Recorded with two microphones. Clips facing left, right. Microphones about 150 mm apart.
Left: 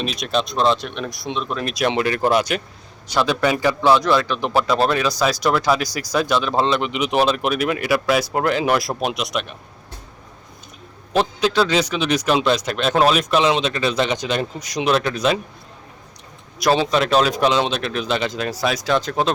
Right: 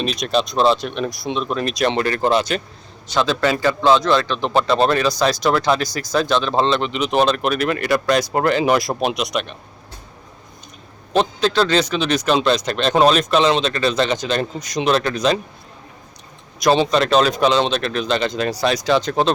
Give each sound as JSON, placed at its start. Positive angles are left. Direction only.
{"t": 0.0, "sound": "a man's voice", "side_deg": 0}
{"t": 3.8, "sound": "speech", "side_deg": -20}
{"t": 4.0, "sound": "a man's voice", "side_deg": 10}
{"t": 11.3, "sound": "a man's voice", "side_deg": 10}
{"t": 16.6, "sound": "a man's voice", "side_deg": 5}